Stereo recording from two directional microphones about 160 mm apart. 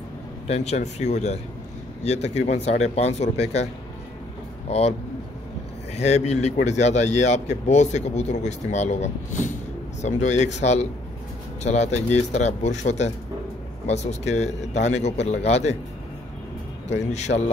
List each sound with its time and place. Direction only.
0.5 s speech: 40° left (ahead or behind)
4.6 s speech: 40° left (ahead or behind)
5.9 s speech: 45° left (ahead or behind)
17.1 s speech: 45° left (ahead or behind)